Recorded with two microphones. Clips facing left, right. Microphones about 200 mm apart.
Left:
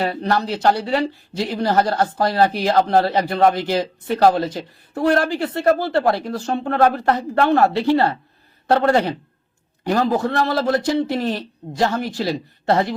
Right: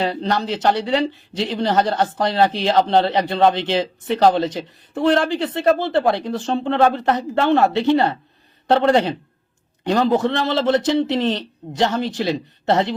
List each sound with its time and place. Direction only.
0.0 s a man's voice: 25° right (ahead or behind)